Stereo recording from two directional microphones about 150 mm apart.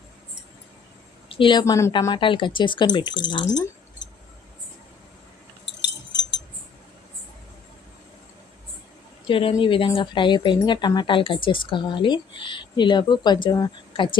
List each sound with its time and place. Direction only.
1.4 s a woman's voice: 30° left (ahead or behind)
9.2 s speech: 35° left (ahead or behind)